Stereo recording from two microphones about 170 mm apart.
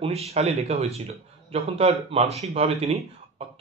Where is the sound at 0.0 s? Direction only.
35° right (ahead or behind).